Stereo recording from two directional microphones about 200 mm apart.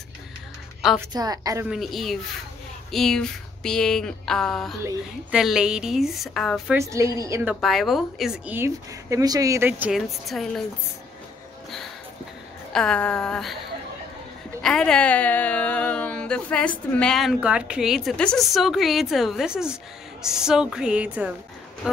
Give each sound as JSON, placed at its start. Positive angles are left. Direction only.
{"t": 1.1, "sound": "a woman's voice", "side_deg": -20}
{"t": 1.7, "sound": "a woman's voice", "side_deg": 0}
{"t": 6.7, "sound": "a woman's voice", "side_deg": -15}
{"t": 7.6, "sound": "a woman's voice", "side_deg": 0}
{"t": 12.7, "sound": "a woman's voice", "side_deg": 5}
{"t": 14.6, "sound": "a woman's voice", "side_deg": 5}